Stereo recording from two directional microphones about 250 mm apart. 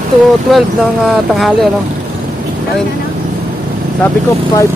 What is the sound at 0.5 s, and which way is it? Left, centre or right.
Speech, centre.